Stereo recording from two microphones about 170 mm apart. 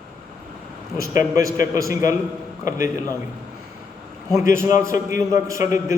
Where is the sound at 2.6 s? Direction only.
50° left (ahead or behind).